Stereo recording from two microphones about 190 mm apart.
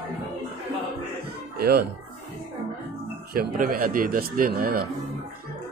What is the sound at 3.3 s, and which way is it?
A man's voice, 50° right (ahead or behind).